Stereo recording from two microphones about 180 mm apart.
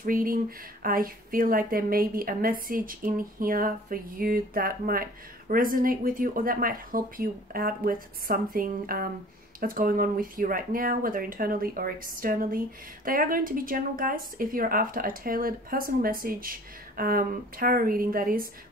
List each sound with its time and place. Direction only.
0.0 s speech: 50° right (ahead or behind)